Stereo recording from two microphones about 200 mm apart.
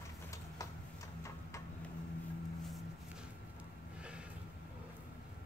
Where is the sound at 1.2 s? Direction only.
15° left (ahead or behind).